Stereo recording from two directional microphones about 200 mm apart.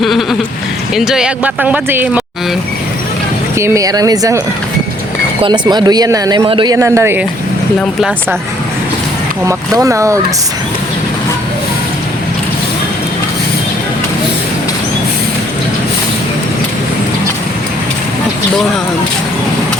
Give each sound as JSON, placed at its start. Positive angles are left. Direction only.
{"t": 0.0, "sound": "bleat", "side_deg": 0}
{"t": 0.9, "sound": "speech", "side_deg": -5}
{"t": 3.6, "sound": "speech", "side_deg": -15}
{"t": 5.4, "sound": "speech", "side_deg": -20}
{"t": 7.8, "sound": "speech", "side_deg": 5}
{"t": 9.5, "sound": "speech", "side_deg": -15}